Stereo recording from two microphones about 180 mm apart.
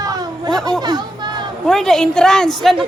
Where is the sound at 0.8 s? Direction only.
25° right (ahead or behind).